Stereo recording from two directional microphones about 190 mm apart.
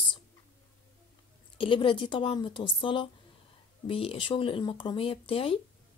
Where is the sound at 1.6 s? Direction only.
25° left (ahead or behind).